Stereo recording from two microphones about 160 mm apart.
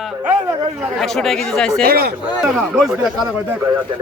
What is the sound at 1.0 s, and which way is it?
Speech, centre (ahead or behind).